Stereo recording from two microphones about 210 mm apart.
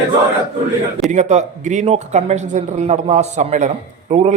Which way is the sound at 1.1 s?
35° right (ahead or behind).